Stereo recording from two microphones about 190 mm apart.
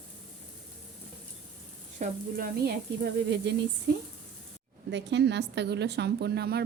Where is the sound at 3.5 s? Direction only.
60° right (ahead or behind).